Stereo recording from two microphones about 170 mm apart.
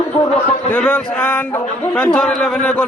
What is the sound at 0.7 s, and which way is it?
A man's voice, 10° left (ahead or behind).